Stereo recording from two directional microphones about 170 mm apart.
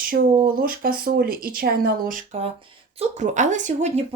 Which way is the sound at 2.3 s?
35° right (ahead or behind).